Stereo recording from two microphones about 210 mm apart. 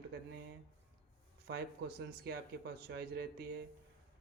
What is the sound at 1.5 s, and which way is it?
Speech, 50° right (ahead or behind).